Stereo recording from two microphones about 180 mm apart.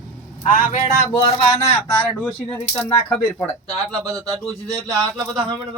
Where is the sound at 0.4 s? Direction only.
45° left (ahead or behind).